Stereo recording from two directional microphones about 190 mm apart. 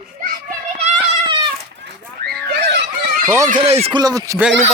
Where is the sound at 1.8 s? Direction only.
60° right (ahead or behind).